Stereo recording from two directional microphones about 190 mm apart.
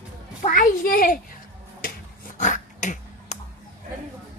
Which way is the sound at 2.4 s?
40° left (ahead or behind).